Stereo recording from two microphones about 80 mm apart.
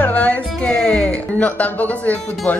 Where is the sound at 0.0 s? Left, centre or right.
Centre.